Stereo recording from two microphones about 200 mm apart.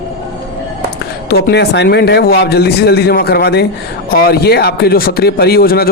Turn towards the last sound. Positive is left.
turn(degrees=50)  # may be behind; listen again after turning